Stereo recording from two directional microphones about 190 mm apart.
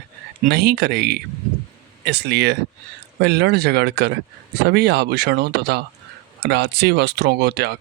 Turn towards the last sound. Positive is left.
turn(degrees=-60)  # may be behind; listen again after turning